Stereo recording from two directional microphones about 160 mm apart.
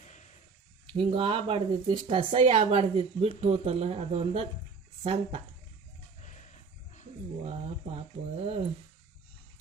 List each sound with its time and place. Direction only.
0.0 s a sound: 45° left (ahead or behind)
0.9 s speech: 35° right (ahead or behind)
6.2 s wild animals: 50° left (ahead or behind)
7.4 s speech: 40° right (ahead or behind)